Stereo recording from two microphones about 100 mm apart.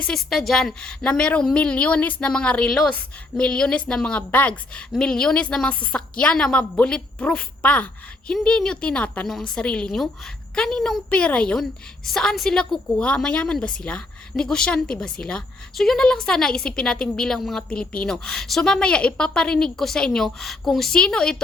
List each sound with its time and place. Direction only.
0.0 s a woman's voice: 5° left (ahead or behind)